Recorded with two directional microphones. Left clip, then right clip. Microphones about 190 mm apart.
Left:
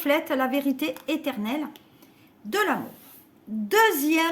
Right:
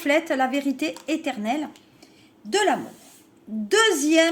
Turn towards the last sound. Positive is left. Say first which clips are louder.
# right 2 dB
turn(degrees=40)  # may be behind; listen again after turning